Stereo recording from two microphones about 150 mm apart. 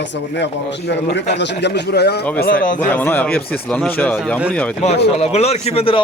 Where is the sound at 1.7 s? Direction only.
90° left.